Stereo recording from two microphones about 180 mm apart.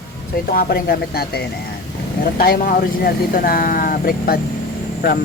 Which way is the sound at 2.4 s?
55° left (ahead or behind).